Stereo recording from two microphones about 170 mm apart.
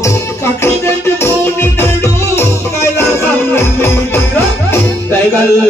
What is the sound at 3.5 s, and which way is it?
Music, 15° left (ahead or behind).